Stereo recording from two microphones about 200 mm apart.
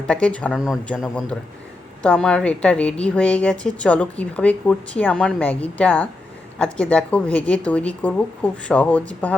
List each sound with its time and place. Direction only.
0.1 s a man's voice: 5° left (ahead or behind)